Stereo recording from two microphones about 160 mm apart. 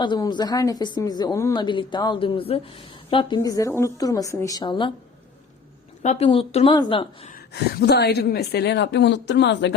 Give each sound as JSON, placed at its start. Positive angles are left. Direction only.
{"t": 0.0, "sound": "speech", "side_deg": 30}
{"t": 6.0, "sound": "a woman's voice", "side_deg": 45}
{"t": 7.5, "sound": "a woman's voice", "side_deg": 90}